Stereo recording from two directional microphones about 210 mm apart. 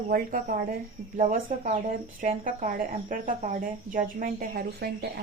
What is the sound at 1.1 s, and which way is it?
Speech, 35° right (ahead or behind).